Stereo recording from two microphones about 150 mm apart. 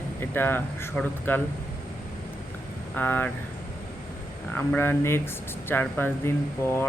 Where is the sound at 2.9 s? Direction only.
10° left (ahead or behind).